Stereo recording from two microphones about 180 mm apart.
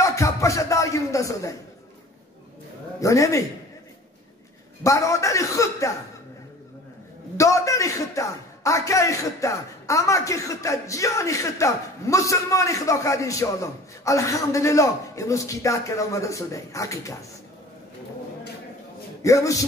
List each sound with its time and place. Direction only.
0.0 s a man's voice: 15° left (ahead or behind)
3.0 s a man's voice: 15° left (ahead or behind)
4.8 s a man's voice: 15° left (ahead or behind)
7.3 s a man's voice: 15° left (ahead or behind)
19.2 s a man's voice: 20° left (ahead or behind)